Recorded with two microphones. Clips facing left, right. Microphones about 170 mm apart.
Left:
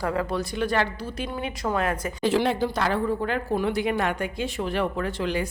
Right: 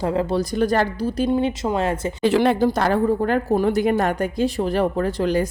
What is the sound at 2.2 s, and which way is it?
A woman's voice, 60° right (ahead or behind).